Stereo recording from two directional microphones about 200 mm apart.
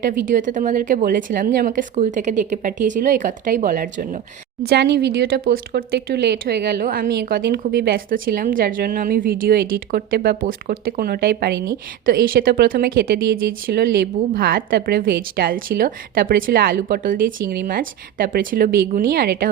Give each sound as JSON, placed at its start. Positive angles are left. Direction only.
{"t": 0.1, "sound": "a woman's voice", "side_deg": -40}
{"t": 4.7, "sound": "speech", "side_deg": -55}